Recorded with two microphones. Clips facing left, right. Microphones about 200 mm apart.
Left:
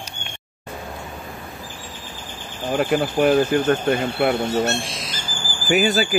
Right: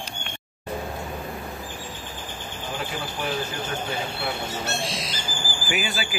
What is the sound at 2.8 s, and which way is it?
Speech, 60° left (ahead or behind).